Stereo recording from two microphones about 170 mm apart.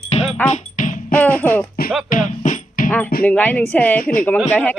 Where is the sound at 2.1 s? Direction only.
50° left (ahead or behind).